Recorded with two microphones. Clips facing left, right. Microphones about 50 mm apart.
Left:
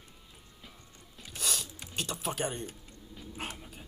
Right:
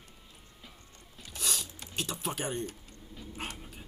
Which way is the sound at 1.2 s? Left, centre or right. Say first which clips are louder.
Even; centre.